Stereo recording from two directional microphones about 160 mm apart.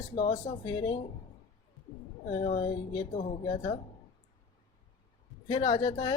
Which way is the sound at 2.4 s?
45° left (ahead or behind).